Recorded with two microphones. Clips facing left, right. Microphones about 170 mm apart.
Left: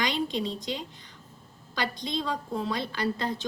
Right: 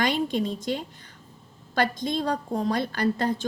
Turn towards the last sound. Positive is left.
turn(degrees=-50)  # may be behind; listen again after turning